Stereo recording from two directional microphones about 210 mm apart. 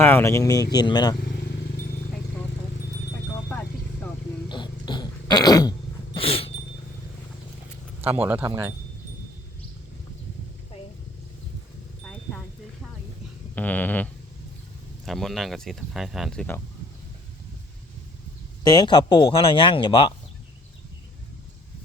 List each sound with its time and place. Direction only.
0.0 s speech: 10° left (ahead or behind)
4.4 s a sound: 20° left (ahead or behind)
6.1 s cat: 25° left (ahead or behind)
8.1 s speech: 10° right (ahead or behind)
13.6 s a sound: 10° left (ahead or behind)
15.0 s speech: centre (ahead or behind)
18.6 s speech: 20° left (ahead or behind)